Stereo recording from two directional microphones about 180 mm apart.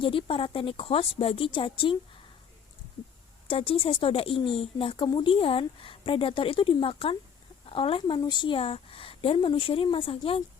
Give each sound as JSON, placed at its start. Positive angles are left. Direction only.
{"t": 0.0, "sound": "a woman's voice", "side_deg": 30}
{"t": 3.5, "sound": "a woman's voice", "side_deg": 30}